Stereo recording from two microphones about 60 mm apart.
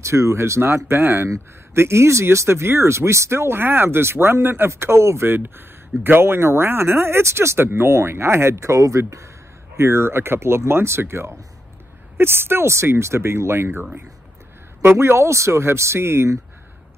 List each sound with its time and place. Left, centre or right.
0.0 s speech: right
9.8 s speech: right